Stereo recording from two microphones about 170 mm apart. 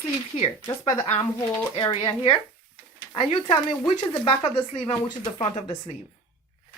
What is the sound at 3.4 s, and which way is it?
Speech, 30° left (ahead or behind).